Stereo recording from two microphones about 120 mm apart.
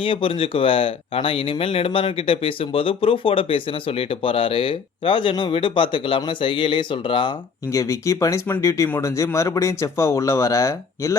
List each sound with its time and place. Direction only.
0.0 s speech: 45° left (ahead or behind)
7.7 s speech: 25° left (ahead or behind)